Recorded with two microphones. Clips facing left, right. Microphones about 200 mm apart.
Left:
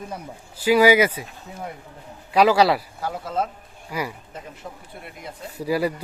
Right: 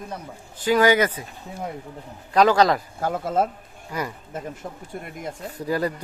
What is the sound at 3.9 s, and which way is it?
Speech, 10° left (ahead or behind).